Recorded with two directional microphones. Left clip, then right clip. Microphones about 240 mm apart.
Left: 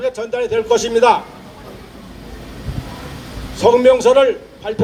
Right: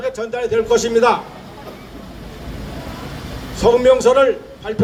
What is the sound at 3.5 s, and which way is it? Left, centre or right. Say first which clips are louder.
A man's voice: left 1 dB; left.